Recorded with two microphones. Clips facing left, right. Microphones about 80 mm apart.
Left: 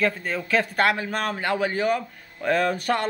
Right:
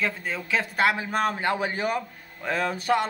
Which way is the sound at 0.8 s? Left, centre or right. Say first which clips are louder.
Even; centre.